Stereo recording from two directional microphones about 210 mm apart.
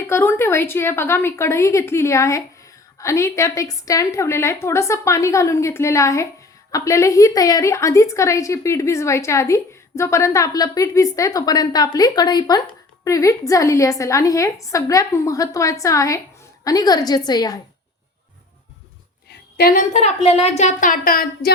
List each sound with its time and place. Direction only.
0.1 s a woman's voice: 10° left (ahead or behind)
19.5 s speech: 45° left (ahead or behind)